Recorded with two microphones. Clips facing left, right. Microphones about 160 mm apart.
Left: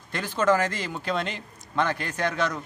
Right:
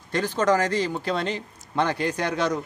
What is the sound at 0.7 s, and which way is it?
Speech, 15° left (ahead or behind).